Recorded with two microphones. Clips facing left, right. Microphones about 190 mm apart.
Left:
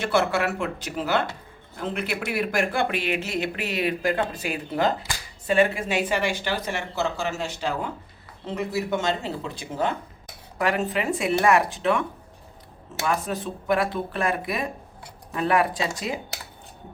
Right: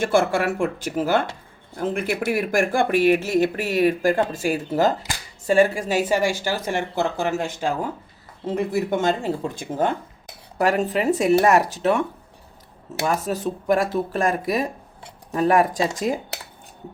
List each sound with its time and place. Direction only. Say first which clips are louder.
0.0 s speech: right 3 dB; 50° right (ahead or behind)
8.7 s speech: right 3 dB; 50° right (ahead or behind)
13.1 s speech: right 3 dB; 40° right (ahead or behind)